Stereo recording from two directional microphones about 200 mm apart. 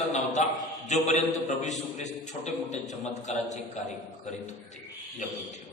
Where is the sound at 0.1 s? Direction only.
35° left (ahead or behind).